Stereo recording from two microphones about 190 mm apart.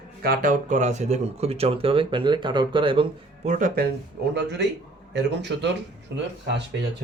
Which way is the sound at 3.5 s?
45° right (ahead or behind).